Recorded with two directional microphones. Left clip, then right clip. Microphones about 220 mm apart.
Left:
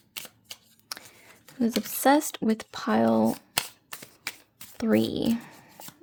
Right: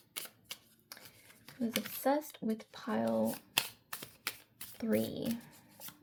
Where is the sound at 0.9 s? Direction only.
40° left (ahead or behind).